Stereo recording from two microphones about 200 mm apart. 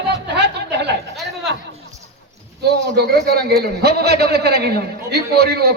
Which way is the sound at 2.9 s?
55° right (ahead or behind).